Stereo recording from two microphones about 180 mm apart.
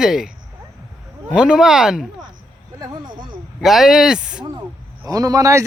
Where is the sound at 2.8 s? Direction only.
20° right (ahead or behind).